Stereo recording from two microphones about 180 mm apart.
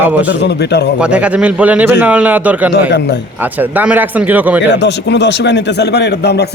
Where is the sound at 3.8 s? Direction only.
10° right (ahead or behind).